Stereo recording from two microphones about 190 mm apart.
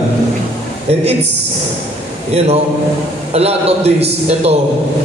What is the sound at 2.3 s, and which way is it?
A man's voice, 35° right (ahead or behind).